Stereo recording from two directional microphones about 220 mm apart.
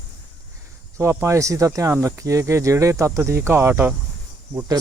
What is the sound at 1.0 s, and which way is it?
Speech, 10° right (ahead or behind).